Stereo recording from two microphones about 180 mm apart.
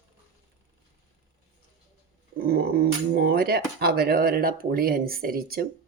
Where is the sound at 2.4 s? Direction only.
55° right (ahead or behind).